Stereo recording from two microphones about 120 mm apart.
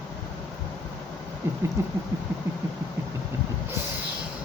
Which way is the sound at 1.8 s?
20° right (ahead or behind).